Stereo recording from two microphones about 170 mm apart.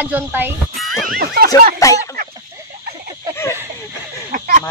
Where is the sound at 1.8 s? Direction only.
20° left (ahead or behind).